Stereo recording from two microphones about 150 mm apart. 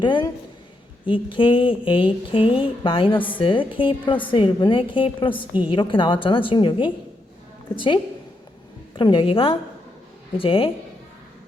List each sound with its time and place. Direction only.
0.0 s a woman's voice: 30° left (ahead or behind)
9.0 s a woman's voice: 35° left (ahead or behind)